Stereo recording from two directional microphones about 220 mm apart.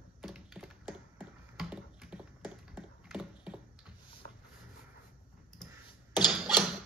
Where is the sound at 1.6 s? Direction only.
5° right (ahead or behind).